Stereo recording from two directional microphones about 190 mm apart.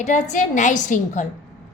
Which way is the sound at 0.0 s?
40° left (ahead or behind).